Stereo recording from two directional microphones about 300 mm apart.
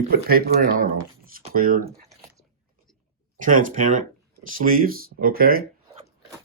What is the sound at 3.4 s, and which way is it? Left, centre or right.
Speech, right.